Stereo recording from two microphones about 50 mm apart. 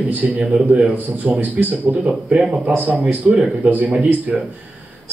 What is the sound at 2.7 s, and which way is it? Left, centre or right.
Speech, right.